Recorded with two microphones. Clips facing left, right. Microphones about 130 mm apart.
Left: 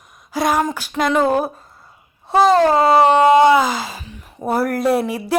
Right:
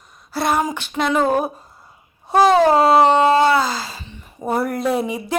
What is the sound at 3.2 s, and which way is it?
Speech, 15° left (ahead or behind).